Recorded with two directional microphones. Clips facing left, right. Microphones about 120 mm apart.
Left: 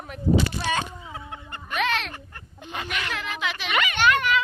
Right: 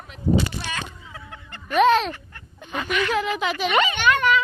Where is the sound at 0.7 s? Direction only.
25° left (ahead or behind).